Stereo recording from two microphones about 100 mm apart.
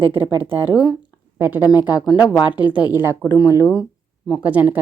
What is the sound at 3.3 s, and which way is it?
Speech, 45° left (ahead or behind).